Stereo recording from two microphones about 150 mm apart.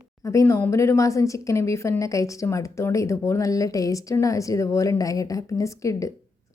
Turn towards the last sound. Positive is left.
turn(degrees=20)  # may be behind; listen again after turning